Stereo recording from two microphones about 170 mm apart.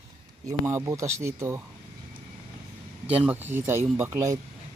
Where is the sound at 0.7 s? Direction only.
15° right (ahead or behind).